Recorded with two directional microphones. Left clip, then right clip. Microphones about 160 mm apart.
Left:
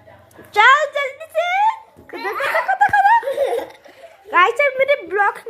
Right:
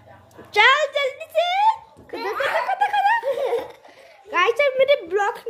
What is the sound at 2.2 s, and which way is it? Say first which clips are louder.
Laughter: left 3 dB; 5° left (ahead or behind).